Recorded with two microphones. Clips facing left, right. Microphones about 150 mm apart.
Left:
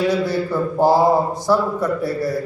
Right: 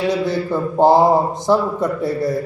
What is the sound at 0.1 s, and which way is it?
A man's voice, 20° right (ahead or behind).